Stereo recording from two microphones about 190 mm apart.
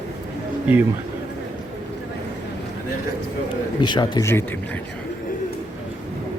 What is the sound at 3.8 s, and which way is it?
Speech, 25° left (ahead or behind).